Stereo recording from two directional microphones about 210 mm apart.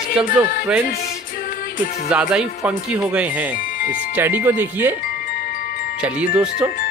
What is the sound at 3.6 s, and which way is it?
Music, 40° left (ahead or behind).